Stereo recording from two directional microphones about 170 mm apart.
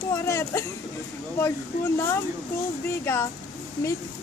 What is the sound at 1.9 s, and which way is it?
Speech, 15° left (ahead or behind).